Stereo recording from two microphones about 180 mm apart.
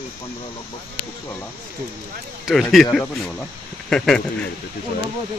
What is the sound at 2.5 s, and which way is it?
Speech, centre (ahead or behind).